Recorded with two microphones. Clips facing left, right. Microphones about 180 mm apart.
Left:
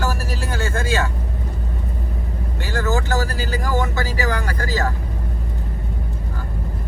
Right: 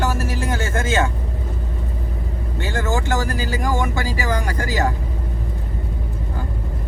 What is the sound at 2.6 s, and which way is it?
Vehicle, 20° right (ahead or behind).